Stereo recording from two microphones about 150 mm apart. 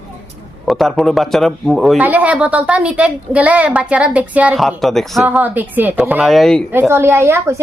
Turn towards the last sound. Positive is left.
turn(degrees=-20)  # may be behind; listen again after turning